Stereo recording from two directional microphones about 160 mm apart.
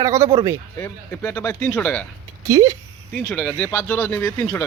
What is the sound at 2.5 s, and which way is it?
Speech, 20° right (ahead or behind).